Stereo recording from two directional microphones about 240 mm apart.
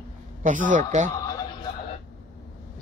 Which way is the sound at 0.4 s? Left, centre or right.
Right.